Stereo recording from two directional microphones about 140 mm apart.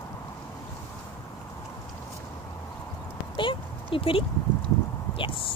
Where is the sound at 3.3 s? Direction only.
35° left (ahead or behind).